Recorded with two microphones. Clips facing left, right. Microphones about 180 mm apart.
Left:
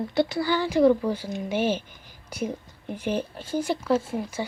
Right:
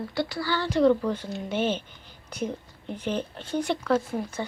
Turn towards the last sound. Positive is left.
turn(degrees=5)  # may be behind; listen again after turning